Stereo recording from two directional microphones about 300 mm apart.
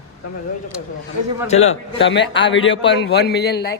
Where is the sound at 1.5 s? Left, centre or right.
Left.